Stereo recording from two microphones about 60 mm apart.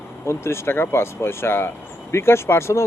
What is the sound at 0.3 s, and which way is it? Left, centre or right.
Speech, left.